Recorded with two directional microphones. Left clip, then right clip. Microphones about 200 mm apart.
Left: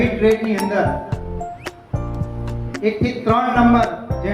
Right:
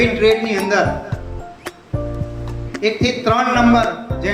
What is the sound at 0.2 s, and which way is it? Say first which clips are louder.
Speech: right 2 dB; 15° right (ahead or behind).